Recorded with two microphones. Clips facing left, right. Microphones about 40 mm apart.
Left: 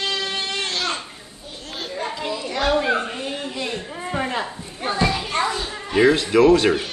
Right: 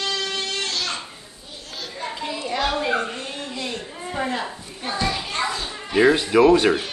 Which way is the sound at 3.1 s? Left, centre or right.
Left.